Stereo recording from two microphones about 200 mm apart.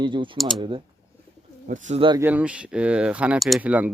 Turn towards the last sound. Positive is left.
turn(degrees=-5)  # may be behind; listen again after turning